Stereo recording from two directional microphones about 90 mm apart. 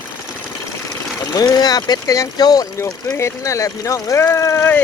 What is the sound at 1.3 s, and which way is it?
Speech, 45° left (ahead or behind).